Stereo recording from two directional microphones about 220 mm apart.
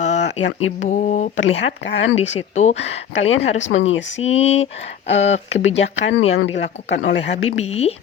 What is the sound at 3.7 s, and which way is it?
Speech, 60° left (ahead or behind).